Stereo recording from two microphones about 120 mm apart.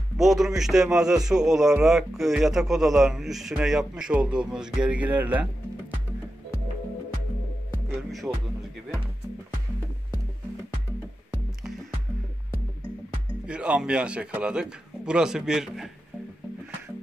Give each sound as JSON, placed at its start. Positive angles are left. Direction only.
{"t": 0.2, "sound": "a man's voice", "side_deg": 0}
{"t": 8.3, "sound": "a man's voice", "side_deg": -5}
{"t": 13.5, "sound": "a man's voice", "side_deg": -10}